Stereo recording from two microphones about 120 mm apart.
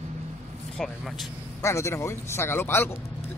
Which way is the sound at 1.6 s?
25° left (ahead or behind).